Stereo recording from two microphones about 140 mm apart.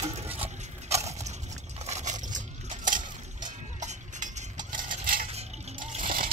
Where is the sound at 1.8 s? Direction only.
55° right (ahead or behind).